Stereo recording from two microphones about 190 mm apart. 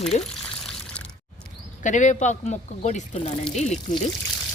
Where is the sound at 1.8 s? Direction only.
40° left (ahead or behind).